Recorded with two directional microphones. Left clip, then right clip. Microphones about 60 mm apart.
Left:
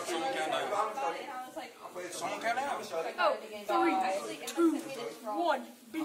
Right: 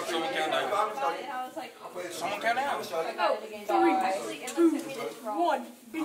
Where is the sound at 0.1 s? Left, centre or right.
Centre.